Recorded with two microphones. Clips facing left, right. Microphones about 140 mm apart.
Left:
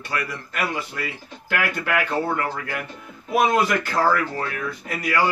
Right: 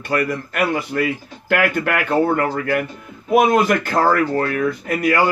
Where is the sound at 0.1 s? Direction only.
50° right (ahead or behind).